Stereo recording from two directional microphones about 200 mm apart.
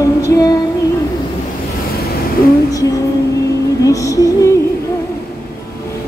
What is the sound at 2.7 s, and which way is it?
Music, 15° left (ahead or behind).